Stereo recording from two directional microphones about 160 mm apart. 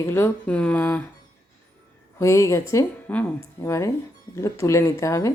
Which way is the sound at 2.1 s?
20° left (ahead or behind).